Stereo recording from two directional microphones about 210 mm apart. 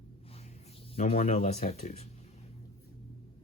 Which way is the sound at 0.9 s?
30° left (ahead or behind).